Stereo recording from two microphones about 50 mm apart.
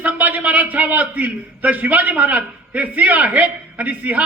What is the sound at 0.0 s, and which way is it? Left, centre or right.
A man's voice, right.